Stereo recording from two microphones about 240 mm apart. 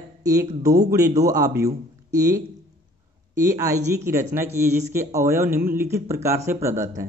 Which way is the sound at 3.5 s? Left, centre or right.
Centre.